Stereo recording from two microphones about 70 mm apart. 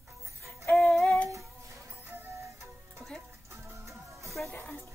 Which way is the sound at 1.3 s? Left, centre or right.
Right.